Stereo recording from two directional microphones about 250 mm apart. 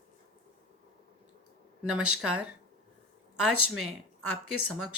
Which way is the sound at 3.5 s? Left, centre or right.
Right.